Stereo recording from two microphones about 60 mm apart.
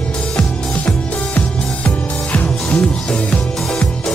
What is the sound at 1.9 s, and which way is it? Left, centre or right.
Music, left.